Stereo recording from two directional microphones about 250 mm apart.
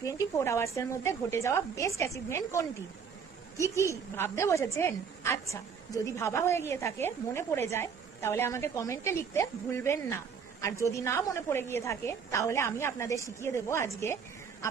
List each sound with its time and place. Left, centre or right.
0.0 s a woman's voice: centre